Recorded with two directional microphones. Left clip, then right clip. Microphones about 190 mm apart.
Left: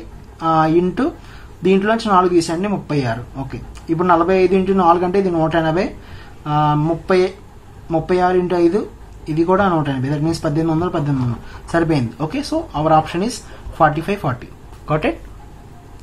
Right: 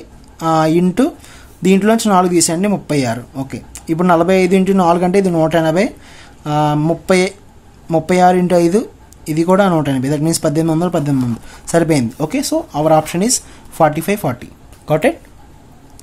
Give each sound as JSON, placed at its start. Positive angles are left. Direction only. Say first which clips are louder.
{"t": 0.4, "sound": "speech", "louder": "right 1 dB", "side_deg": -50}